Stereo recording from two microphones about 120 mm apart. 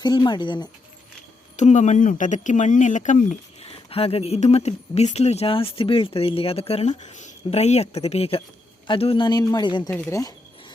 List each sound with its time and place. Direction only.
0.0 s speech: 40° left (ahead or behind)
1.5 s speech: 80° left; by 9.9 s 40° left (ahead or behind)
10.1 s speech: 25° left (ahead or behind)